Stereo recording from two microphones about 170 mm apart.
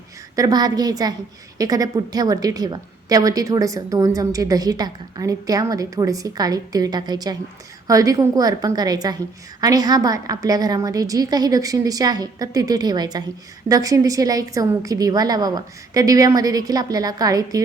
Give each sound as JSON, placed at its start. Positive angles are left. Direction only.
{"t": 0.3, "sound": "a woman's voice", "side_deg": -20}